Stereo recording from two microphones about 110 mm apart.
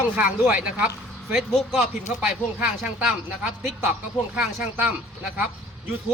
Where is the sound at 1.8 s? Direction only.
90° left.